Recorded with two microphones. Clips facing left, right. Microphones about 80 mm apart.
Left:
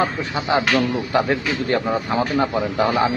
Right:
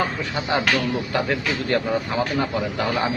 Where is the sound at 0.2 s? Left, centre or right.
Centre.